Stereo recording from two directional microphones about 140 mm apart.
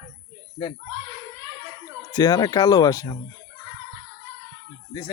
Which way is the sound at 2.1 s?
30° left (ahead or behind).